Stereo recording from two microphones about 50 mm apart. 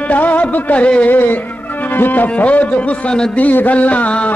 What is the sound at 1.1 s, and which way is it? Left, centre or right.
A man's voice, left.